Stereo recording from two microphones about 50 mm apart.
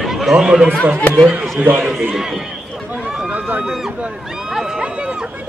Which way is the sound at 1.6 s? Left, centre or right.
Right.